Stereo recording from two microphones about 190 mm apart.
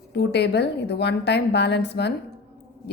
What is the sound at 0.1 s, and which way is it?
A woman's voice, 60° left (ahead or behind).